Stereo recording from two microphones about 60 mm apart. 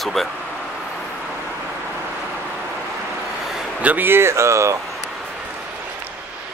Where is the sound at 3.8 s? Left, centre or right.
Right.